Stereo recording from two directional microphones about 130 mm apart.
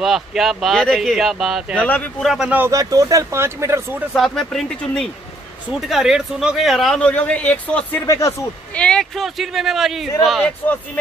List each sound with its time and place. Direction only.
0.0 s a man's voice: centre (ahead or behind)
1.8 s speech: 10° left (ahead or behind)
2.2 s speech: 5° right (ahead or behind)
2.7 s speech: 25° right (ahead or behind)
4.2 s a man's voice: 5° left (ahead or behind)
8.1 s speech: 25° left (ahead or behind)
8.7 s a man's voice: 10° left (ahead or behind)